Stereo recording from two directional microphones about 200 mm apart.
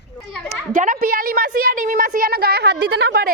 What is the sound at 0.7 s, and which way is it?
A woman's voice, 45° right (ahead or behind).